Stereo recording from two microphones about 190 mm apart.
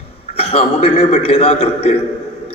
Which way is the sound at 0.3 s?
30° left (ahead or behind).